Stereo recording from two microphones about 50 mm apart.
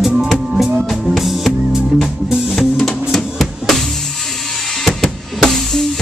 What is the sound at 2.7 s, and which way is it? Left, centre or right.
Music, centre.